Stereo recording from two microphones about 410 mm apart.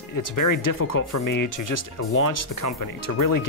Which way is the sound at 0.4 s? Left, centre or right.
Left.